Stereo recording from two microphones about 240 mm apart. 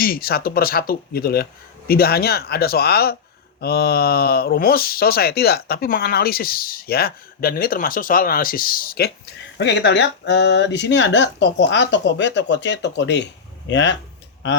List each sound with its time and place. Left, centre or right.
0.0 s speech: left